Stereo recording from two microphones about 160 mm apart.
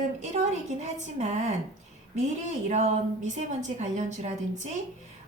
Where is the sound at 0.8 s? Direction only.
45° right (ahead or behind).